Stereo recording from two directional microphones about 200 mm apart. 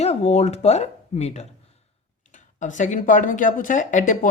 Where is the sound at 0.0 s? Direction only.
30° left (ahead or behind).